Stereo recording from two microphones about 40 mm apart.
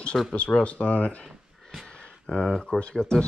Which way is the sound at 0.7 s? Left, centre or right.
Left.